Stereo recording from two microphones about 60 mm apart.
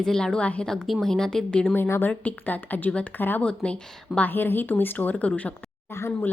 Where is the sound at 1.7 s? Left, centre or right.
Left.